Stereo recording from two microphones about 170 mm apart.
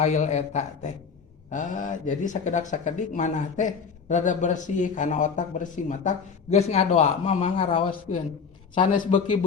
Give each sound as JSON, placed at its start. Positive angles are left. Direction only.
{"t": 0.0, "sound": "speech", "side_deg": 40}
{"t": 8.7, "sound": "speech", "side_deg": 50}